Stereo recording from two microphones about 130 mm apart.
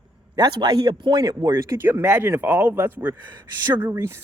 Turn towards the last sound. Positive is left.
turn(degrees=-20)  # may be behind; listen again after turning